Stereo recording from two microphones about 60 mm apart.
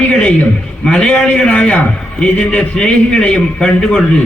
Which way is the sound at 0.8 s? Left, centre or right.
Centre.